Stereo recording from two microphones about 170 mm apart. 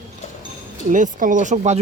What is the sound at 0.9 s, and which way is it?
Speech, 50° right (ahead or behind).